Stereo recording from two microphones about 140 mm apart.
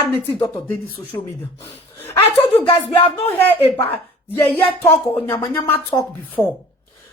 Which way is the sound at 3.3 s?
15° left (ahead or behind).